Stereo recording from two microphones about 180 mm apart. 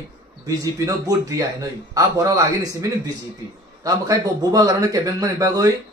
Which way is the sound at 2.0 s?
20° right (ahead or behind).